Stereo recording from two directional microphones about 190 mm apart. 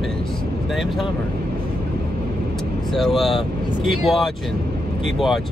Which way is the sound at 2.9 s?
Centre (ahead or behind).